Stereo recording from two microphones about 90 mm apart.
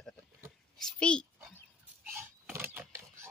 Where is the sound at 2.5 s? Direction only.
25° right (ahead or behind).